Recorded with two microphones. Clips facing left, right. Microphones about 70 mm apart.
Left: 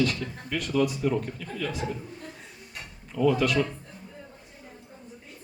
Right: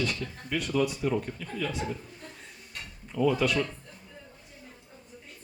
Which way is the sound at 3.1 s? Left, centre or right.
Centre.